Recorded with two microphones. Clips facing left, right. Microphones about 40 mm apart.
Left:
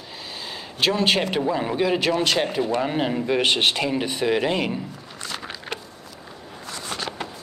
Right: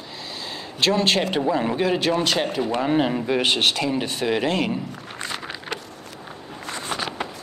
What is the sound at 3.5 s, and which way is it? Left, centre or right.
Speech, centre.